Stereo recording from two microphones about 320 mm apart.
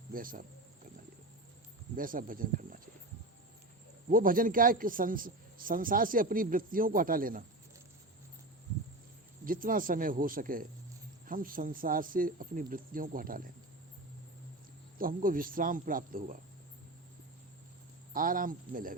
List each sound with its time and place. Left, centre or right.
0.1 s a man's voice: right
2.0 s a man's voice: right
4.1 s a man's voice: right
9.4 s a man's voice: right
14.9 s a man's voice: right
18.1 s a man's voice: right